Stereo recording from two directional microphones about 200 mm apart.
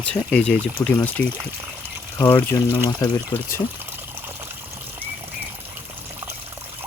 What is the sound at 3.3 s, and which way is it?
Speech, 20° left (ahead or behind).